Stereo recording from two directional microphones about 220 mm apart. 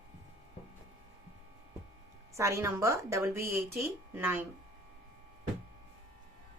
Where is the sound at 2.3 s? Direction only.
15° right (ahead or behind).